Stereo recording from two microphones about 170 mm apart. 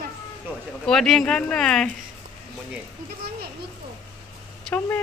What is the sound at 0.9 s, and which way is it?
Speech, 5° left (ahead or behind).